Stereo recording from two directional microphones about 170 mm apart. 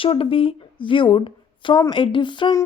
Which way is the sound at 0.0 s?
30° left (ahead or behind).